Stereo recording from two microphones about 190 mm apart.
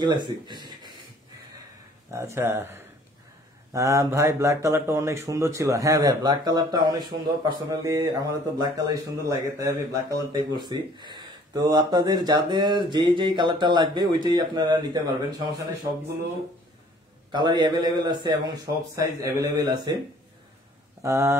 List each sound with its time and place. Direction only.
0.0 s speech: 25° right (ahead or behind)
2.0 s speech: 15° right (ahead or behind)
17.3 s speech: 25° right (ahead or behind)
21.0 s speech: 15° right (ahead or behind)